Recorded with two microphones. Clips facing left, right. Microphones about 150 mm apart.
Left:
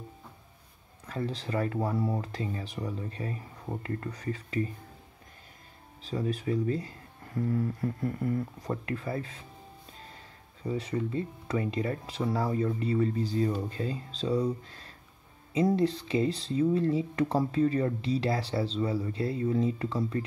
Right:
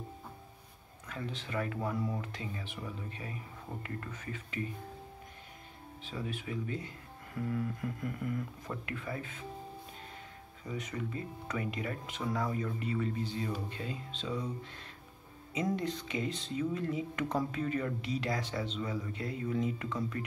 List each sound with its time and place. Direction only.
1.0 s speech: 35° left (ahead or behind)
6.0 s speech: 40° left (ahead or behind)
10.6 s speech: 30° left (ahead or behind)